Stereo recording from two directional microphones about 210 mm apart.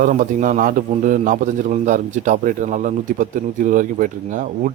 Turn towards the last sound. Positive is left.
turn(degrees=-40)  # may be behind; listen again after turning